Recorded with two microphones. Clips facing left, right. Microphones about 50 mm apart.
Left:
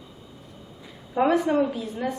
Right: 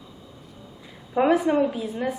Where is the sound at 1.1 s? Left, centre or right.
Centre.